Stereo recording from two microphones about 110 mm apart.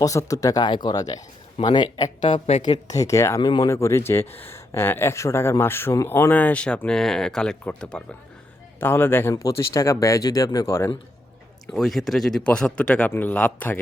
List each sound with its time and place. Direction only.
0.0 s speech: 30° left (ahead or behind)
2.3 s speech: 50° left (ahead or behind)
2.6 s speech: 35° left (ahead or behind); by 8.0 s 10° left (ahead or behind)
8.8 s speech: 20° left (ahead or behind)
9.3 s speech: 30° left (ahead or behind)
11.7 s speech: centre (ahead or behind)